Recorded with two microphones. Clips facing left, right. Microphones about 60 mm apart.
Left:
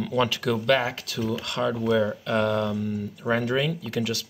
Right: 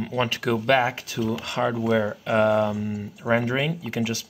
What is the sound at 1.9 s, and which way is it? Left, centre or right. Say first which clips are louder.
Speech: right 1 dB; centre.